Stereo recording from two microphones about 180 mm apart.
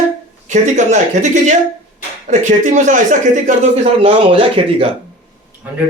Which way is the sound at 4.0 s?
30° right (ahead or behind).